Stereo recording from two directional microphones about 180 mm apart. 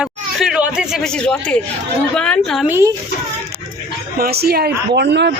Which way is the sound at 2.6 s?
10° right (ahead or behind).